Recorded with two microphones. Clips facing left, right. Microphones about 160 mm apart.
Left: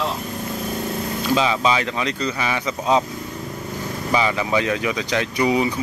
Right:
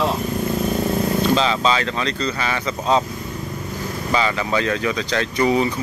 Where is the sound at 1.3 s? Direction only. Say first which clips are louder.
Even; 10° left (ahead or behind).